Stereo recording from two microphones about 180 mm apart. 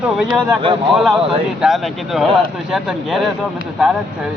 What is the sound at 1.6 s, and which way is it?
Speech, centre (ahead or behind).